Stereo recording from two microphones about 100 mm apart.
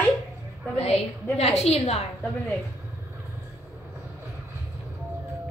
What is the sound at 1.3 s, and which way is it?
Speech, 90° left.